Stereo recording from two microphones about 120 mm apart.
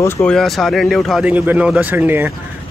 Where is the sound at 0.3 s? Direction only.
Centre (ahead or behind).